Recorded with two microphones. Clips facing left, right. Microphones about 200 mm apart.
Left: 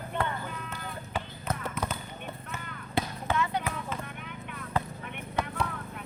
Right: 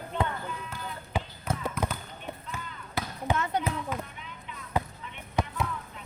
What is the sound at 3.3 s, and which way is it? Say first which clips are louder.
Basketball bounce: even; 45° right (ahead or behind).